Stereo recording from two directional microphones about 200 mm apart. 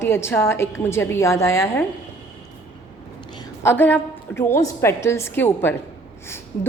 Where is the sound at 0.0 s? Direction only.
10° left (ahead or behind).